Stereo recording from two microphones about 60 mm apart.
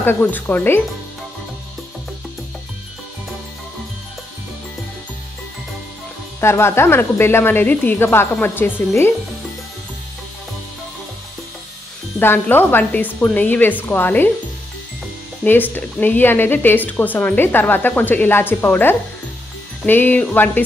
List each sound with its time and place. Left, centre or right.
0.0 s speech: left
6.4 s a woman's voice: left
7.6 s speech: left
8.0 s speech: left
12.2 s speech: left
15.4 s speech: left